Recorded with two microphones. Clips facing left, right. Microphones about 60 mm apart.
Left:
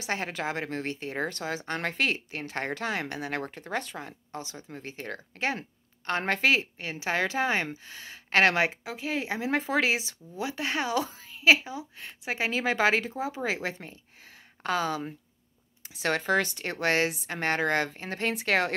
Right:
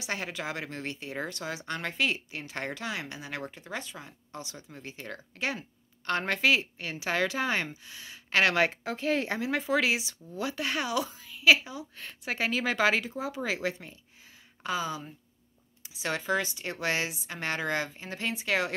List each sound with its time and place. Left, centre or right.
0.0 s speech: left
4.3 s speech: left
8.8 s speech: centre
9.4 s a woman's voice: left
14.6 s speech: left